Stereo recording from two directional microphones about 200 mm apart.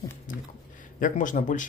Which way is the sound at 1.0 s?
40° left (ahead or behind).